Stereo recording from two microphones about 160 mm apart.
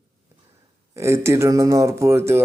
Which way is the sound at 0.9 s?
15° right (ahead or behind).